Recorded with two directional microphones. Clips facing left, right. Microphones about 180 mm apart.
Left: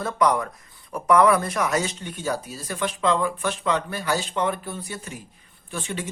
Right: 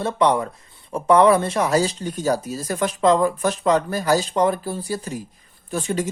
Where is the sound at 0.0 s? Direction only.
25° right (ahead or behind).